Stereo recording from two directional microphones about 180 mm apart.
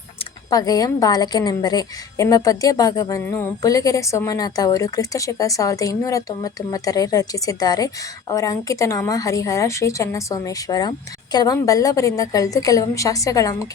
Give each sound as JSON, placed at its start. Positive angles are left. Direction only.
{"t": 0.5, "sound": "a woman's voice", "side_deg": 20}